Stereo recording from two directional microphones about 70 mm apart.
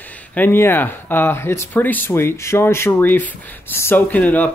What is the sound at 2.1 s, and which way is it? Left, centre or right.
Speech, left.